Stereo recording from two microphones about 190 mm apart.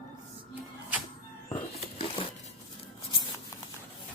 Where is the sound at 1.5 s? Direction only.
25° left (ahead or behind).